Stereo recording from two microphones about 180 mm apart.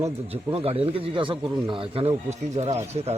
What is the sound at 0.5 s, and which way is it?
Speech, 35° right (ahead or behind).